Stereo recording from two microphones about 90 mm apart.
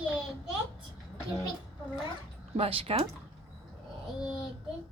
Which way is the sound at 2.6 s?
90° right.